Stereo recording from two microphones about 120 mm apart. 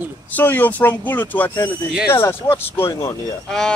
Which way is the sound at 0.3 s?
15° left (ahead or behind).